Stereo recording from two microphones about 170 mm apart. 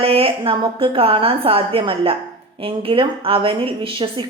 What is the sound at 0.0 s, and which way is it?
A woman's voice, 35° right (ahead or behind).